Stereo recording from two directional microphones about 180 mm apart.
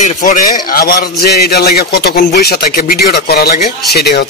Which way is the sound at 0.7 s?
55° left (ahead or behind).